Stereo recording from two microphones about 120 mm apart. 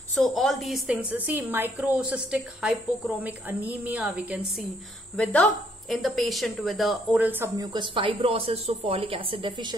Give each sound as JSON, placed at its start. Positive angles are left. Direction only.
{"t": 0.1, "sound": "a woman's voice", "side_deg": 0}
{"t": 0.8, "sound": "a woman's voice", "side_deg": -10}
{"t": 5.1, "sound": "a woman's voice", "side_deg": 10}
{"t": 7.1, "sound": "a woman's voice", "side_deg": -15}
{"t": 7.5, "sound": "speech", "side_deg": -40}